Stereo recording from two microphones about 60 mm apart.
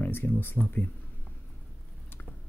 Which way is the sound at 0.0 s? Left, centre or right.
Left.